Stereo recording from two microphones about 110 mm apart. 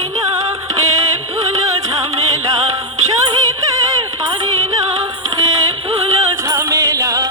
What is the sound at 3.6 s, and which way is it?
Music, 30° right (ahead or behind).